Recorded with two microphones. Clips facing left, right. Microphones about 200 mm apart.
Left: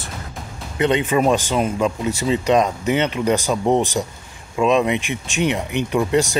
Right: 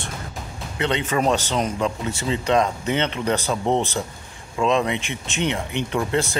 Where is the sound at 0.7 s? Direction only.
15° left (ahead or behind).